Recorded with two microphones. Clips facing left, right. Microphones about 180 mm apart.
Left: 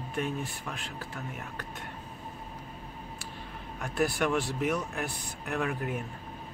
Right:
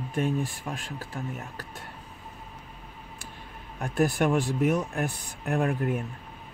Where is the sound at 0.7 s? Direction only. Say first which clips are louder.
Right 4 dB; 45° right (ahead or behind).